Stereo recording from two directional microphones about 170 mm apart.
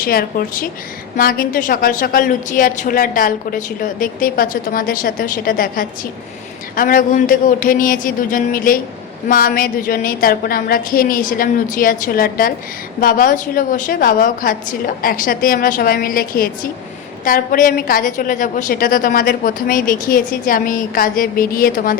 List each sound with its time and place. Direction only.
0.0 s a woman's voice: 60° left (ahead or behind)